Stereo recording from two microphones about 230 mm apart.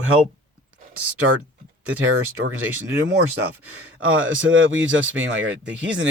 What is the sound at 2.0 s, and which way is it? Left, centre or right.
Speech, right.